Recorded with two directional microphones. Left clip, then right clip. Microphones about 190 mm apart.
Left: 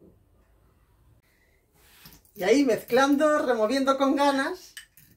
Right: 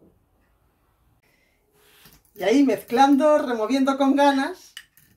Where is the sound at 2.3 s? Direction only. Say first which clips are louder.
Right 2 dB; 40° right (ahead or behind).